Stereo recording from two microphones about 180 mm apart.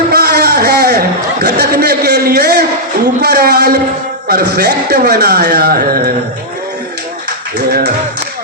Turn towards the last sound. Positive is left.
turn(degrees=-60)  # may be behind; listen again after turning